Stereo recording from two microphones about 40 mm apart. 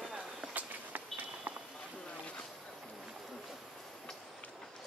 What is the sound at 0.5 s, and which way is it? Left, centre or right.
Walk, right.